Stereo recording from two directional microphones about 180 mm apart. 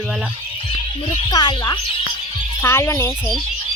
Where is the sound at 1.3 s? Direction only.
20° left (ahead or behind).